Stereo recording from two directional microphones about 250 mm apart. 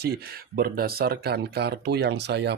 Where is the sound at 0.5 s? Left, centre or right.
Right.